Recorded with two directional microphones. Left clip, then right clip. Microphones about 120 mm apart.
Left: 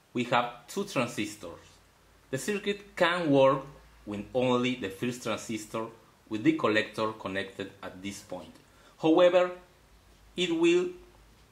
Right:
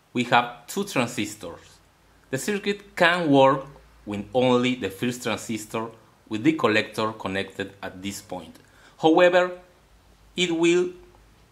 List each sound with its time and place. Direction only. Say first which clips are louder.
0.1 s speech: right 7 dB; 35° right (ahead or behind)